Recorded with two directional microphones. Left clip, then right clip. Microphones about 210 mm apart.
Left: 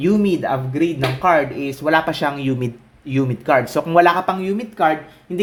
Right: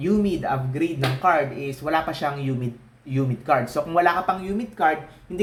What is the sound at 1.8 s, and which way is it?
Speech, 45° left (ahead or behind).